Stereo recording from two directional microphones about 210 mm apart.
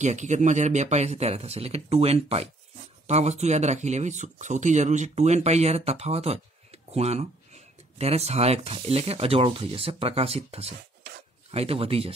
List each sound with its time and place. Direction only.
0.0 s speech: 35° right (ahead or behind)